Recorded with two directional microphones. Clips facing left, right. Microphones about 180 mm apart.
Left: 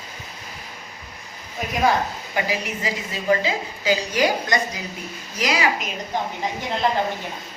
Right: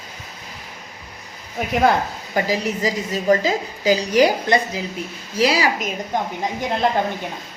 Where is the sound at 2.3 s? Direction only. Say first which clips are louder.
Right 5 dB; 40° right (ahead or behind).